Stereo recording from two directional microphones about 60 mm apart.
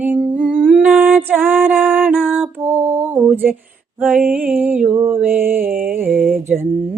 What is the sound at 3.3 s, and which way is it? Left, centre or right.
Mantra, right.